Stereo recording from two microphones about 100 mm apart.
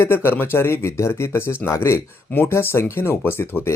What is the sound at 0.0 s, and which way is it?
Speech, 25° left (ahead or behind).